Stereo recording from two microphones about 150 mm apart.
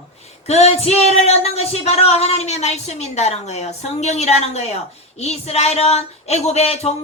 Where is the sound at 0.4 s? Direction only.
45° left (ahead or behind).